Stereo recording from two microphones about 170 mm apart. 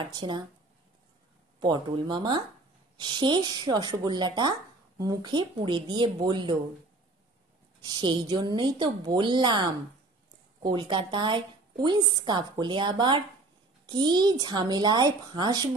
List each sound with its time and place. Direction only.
0.0 s speech: 25° right (ahead or behind)
1.6 s speech: 25° right (ahead or behind)
7.8 s speech: 25° right (ahead or behind)